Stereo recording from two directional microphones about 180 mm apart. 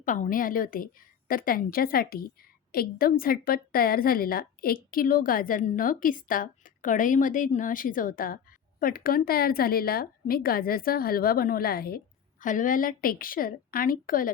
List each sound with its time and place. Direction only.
0.0 s a woman's voice: 45° left (ahead or behind)